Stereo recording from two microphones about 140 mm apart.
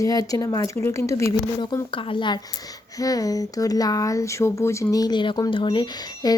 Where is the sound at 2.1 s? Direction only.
35° left (ahead or behind).